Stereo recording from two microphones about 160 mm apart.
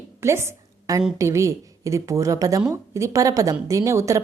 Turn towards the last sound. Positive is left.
turn(degrees=-20)  # may be behind; listen again after turning